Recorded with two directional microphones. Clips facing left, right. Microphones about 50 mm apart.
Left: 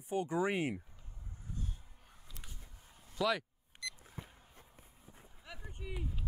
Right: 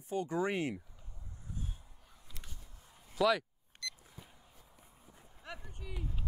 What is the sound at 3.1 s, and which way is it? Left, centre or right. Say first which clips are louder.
Speech: right 4 dB; centre.